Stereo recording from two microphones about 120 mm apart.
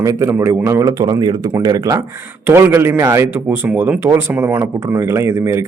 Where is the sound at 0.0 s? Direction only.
25° right (ahead or behind).